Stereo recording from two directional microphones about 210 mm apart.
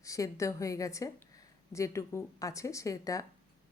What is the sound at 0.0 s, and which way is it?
A woman's voice, 15° left (ahead or behind).